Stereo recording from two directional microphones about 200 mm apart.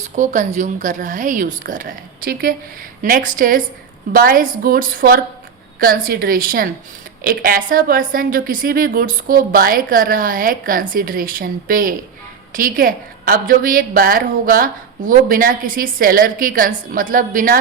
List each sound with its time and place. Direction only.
0.2 s a woman's voice: 40° right (ahead or behind)